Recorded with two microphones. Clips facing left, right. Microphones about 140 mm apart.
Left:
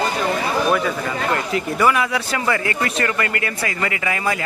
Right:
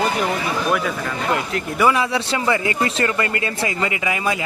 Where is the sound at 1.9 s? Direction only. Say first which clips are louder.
Right 1 dB; 25° right (ahead or behind).